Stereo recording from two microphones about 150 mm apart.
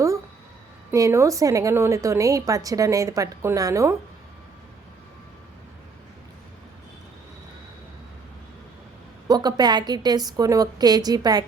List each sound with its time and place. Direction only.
0.9 s a woman's voice: 20° right (ahead or behind)
9.2 s a woman's voice: 25° right (ahead or behind)